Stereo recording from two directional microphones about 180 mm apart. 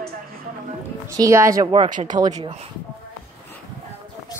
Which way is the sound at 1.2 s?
15° right (ahead or behind).